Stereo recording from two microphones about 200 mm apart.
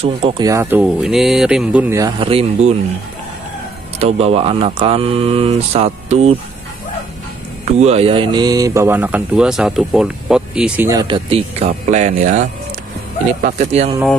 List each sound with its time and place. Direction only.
0.0 s speech: 25° right (ahead or behind)
4.0 s speech: 30° right (ahead or behind)
7.6 s speech: 30° right (ahead or behind); by 11.1 s 10° right (ahead or behind)
11.1 s a man's voice: 25° right (ahead or behind)
13.6 s a man's voice: 30° right (ahead or behind)